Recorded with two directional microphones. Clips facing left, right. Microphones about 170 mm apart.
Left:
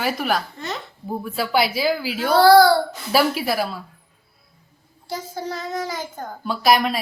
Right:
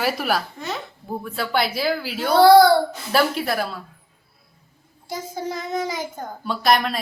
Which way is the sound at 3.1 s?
5° left (ahead or behind).